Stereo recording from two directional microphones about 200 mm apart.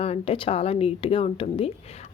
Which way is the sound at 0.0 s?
30° left (ahead or behind).